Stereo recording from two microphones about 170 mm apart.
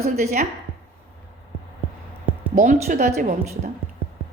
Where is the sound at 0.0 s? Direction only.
40° right (ahead or behind).